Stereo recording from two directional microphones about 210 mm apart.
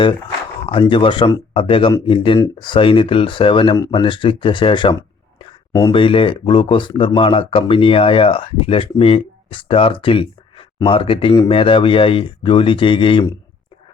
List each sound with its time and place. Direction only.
0.7 s speech: 25° left (ahead or behind)